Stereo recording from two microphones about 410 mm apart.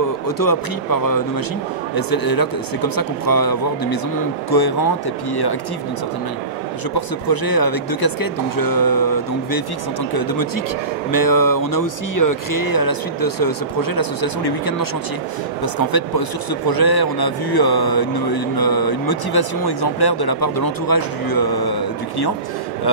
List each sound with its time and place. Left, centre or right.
0.4 s a man's voice: left
7.2 s a man's voice: left